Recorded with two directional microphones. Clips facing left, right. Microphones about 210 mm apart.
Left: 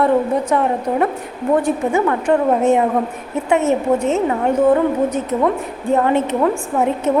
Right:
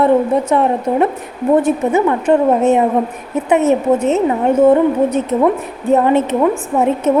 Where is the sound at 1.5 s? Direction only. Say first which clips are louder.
Right 3 dB; 20° right (ahead or behind).